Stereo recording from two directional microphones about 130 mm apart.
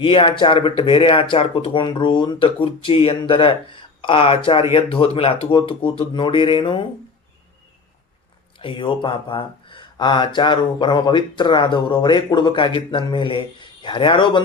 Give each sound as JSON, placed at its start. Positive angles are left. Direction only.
{"t": 0.0, "sound": "speech", "side_deg": 40}
{"t": 8.5, "sound": "speech", "side_deg": 40}